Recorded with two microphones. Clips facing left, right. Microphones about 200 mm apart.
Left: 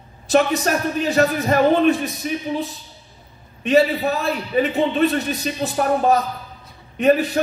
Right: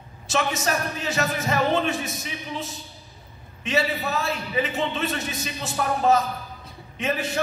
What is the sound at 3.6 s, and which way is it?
A man's voice, 35° left (ahead or behind).